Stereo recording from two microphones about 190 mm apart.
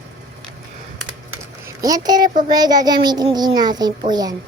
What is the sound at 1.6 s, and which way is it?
A child's voice, 20° right (ahead or behind).